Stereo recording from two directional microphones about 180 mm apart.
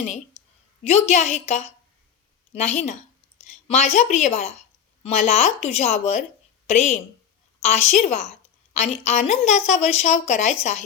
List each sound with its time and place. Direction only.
0.9 s a woman's voice: 35° left (ahead or behind)